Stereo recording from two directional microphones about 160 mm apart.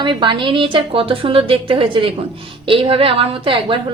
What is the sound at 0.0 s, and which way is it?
A woman's voice, 30° right (ahead or behind).